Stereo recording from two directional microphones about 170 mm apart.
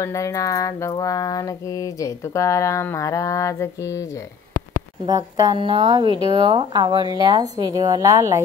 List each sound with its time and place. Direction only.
0.0 s mantra: 20° left (ahead or behind)
5.0 s speech: 25° right (ahead or behind)